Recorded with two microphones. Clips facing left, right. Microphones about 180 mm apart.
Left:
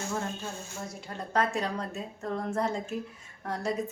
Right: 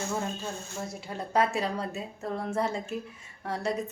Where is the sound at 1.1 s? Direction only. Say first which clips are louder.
Right 2 dB; 10° right (ahead or behind).